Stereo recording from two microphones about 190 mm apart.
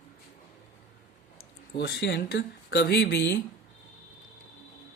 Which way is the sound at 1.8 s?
60° left (ahead or behind).